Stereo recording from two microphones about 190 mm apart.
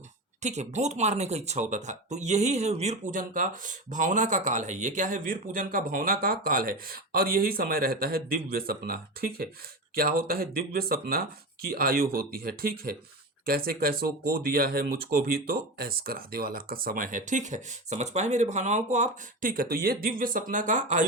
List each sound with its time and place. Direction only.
0.4 s speech: 35° right (ahead or behind)